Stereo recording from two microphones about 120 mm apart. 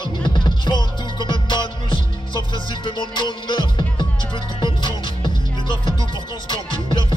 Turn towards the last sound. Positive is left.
turn(degrees=40)  # may be behind; listen again after turning